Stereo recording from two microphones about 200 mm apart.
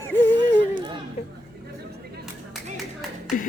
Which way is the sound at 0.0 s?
10° left (ahead or behind).